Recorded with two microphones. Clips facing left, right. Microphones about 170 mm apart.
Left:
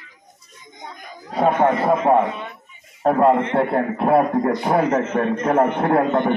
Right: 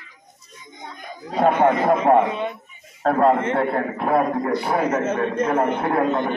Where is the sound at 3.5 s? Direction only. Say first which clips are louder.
Left 2 dB; 30° left (ahead or behind); by 6.3 s 55° left (ahead or behind).